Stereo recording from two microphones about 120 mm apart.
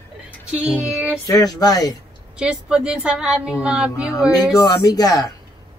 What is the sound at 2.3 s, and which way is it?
A woman's voice, 10° right (ahead or behind).